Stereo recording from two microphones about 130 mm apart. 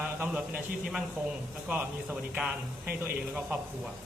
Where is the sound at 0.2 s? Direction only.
10° right (ahead or behind).